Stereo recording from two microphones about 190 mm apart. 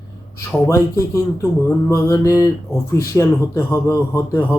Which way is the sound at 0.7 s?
15° left (ahead or behind).